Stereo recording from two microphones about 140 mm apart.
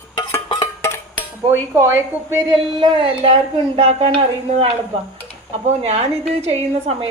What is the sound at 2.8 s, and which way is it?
A woman's voice, 35° right (ahead or behind).